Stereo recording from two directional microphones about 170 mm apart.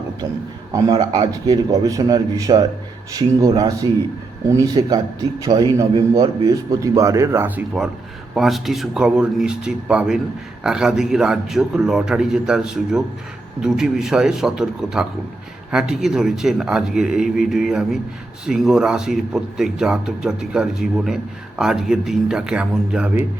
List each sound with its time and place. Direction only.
0.7 s a man's voice: 25° right (ahead or behind); by 23.2 s 5° right (ahead or behind)